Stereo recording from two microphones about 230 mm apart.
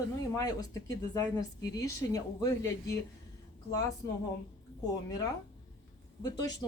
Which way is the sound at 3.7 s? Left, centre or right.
Centre.